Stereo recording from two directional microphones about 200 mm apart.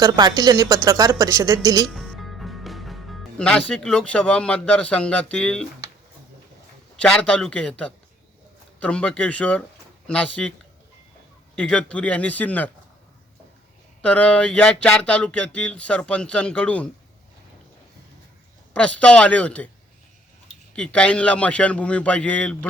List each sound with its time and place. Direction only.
0.0 s a woman's voice: 20° right (ahead or behind)
1.9 s music: centre (ahead or behind)
3.7 s speech: 5° left (ahead or behind)
7.0 s a man's voice: 5° left (ahead or behind)
14.0 s speech: 5° left (ahead or behind)
18.7 s a man's voice: 5° left (ahead or behind)
20.7 s speech: 5° left (ahead or behind)